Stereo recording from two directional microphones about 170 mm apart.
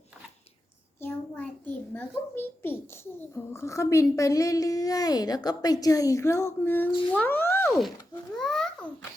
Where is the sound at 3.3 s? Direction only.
15° left (ahead or behind).